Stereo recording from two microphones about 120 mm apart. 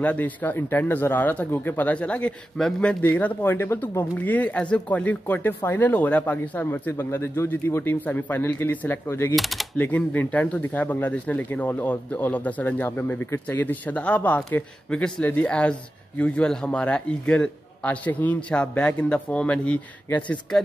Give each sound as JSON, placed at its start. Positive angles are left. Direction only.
{"t": 0.0, "sound": "speech", "side_deg": 15}
{"t": 9.3, "sound": "speech", "side_deg": 0}
{"t": 9.8, "sound": "speech", "side_deg": 15}